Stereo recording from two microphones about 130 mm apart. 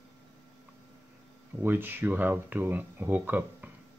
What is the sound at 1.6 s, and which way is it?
Speech, 15° right (ahead or behind).